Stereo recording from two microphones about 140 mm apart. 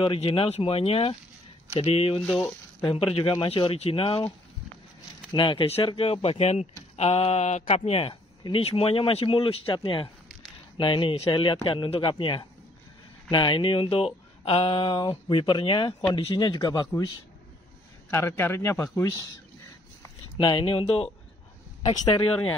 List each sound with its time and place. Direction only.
0.0 s speech: 40° left (ahead or behind)
5.3 s speech: 35° left (ahead or behind)
18.1 s speech: 20° left (ahead or behind)
20.3 s speech: 40° left (ahead or behind)